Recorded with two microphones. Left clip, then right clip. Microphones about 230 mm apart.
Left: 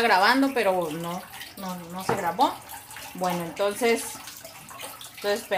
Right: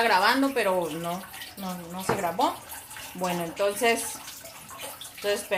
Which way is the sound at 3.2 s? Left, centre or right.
Left.